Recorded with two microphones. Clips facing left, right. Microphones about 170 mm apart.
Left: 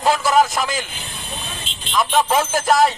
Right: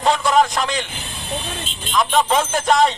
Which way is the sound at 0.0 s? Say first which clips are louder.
Even; 5° left (ahead or behind).